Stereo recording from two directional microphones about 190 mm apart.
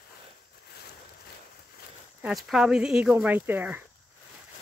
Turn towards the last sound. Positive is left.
turn(degrees=-10)  # may be behind; listen again after turning